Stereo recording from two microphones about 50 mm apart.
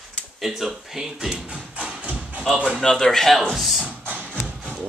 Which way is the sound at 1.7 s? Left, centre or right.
Right.